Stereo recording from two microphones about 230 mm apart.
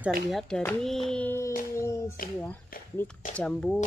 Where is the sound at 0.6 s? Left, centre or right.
Centre.